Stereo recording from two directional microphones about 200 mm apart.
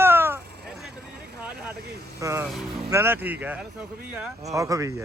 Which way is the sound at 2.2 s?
15° right (ahead or behind).